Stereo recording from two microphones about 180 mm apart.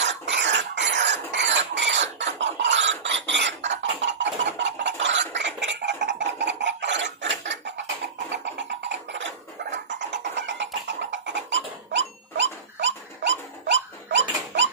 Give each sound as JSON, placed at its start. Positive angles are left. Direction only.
{"t": 0.0, "sound": "cough", "side_deg": -80}
{"t": 5.3, "sound": "a sound", "side_deg": -80}
{"t": 8.6, "sound": "music", "side_deg": -80}